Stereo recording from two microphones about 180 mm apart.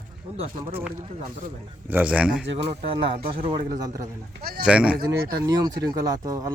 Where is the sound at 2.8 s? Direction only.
30° right (ahead or behind).